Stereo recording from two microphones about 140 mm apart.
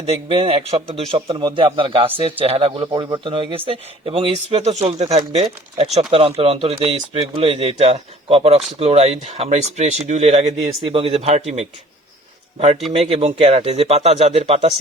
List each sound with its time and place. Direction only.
0.3 s speech: 40° right (ahead or behind)
12.9 s speech: 45° right (ahead or behind)